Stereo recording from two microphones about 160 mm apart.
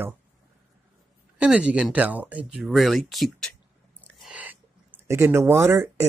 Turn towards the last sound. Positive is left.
turn(degrees=-15)  # may be behind; listen again after turning